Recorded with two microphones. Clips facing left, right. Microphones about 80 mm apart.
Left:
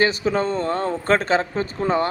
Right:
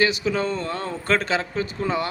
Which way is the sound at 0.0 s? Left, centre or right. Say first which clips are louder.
Left 2 dB; left.